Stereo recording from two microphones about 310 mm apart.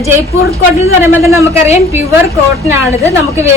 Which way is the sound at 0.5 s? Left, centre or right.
Centre.